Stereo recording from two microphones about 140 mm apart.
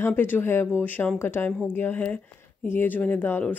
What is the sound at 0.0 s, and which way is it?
Speech, 15° left (ahead or behind).